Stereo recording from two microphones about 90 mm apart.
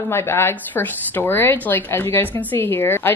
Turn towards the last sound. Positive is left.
turn(degrees=25)  # may be behind; listen again after turning